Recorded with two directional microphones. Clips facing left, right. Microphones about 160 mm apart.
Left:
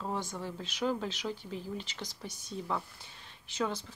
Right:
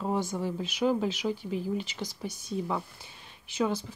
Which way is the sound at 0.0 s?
10° right (ahead or behind).